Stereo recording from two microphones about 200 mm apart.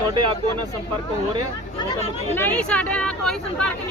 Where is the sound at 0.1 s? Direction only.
25° right (ahead or behind).